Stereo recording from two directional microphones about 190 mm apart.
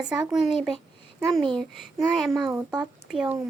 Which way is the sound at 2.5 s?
20° right (ahead or behind).